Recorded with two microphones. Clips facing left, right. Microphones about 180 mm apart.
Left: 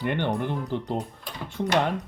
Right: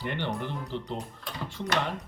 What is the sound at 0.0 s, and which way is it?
Speech, 55° left (ahead or behind).